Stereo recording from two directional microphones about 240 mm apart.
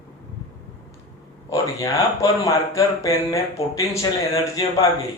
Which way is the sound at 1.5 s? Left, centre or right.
Centre.